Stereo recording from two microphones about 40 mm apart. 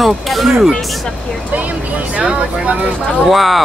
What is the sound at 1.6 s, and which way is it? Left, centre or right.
Speech, right.